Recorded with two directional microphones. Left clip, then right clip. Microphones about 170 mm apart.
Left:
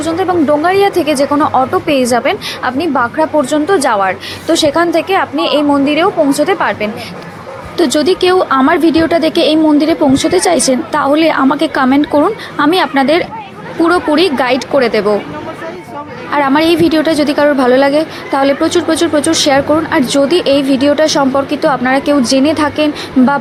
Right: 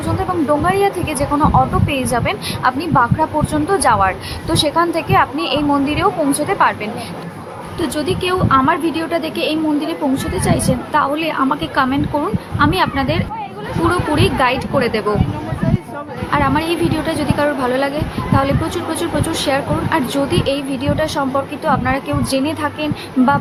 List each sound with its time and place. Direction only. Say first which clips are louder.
0.2 s speech: left 5 dB; 25° left (ahead or behind)
7.8 s a woman's voice: left 9 dB; 40° left (ahead or behind)
16.3 s a woman's voice: left 6 dB; 45° left (ahead or behind)